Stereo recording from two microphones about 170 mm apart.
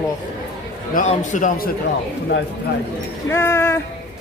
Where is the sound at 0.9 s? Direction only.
50° left (ahead or behind).